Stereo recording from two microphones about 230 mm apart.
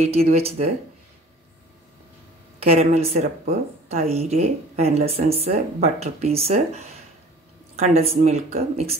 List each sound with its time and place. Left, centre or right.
0.0 s speech: right
2.6 s speech: right